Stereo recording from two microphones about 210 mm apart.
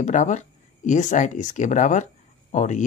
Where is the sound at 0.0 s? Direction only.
35° left (ahead or behind).